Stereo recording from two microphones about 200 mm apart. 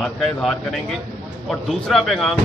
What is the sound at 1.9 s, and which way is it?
Speech, centre (ahead or behind).